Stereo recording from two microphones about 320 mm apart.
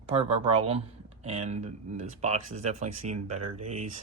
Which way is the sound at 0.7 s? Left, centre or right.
Centre.